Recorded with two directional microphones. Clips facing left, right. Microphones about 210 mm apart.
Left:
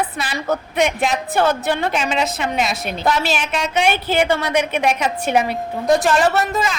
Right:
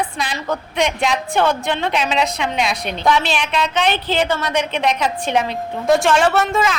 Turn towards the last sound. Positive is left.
turn(degrees=0)  # may be behind; listen again after turning